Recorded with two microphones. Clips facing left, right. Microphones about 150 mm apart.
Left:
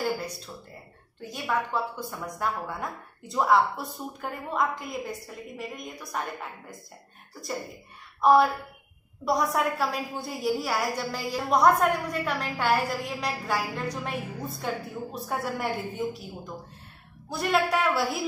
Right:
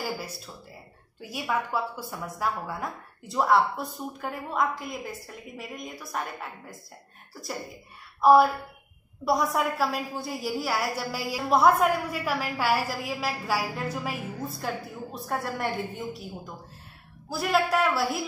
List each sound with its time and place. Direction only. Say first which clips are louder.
0.0 s a sound: left 4 dB; 5° right (ahead or behind)
1.2 s a woman's voice: even; 10° right (ahead or behind)
8.2 s a woman's voice: right 2 dB; centre (ahead or behind)
17.3 s a woman's voice: even; centre (ahead or behind)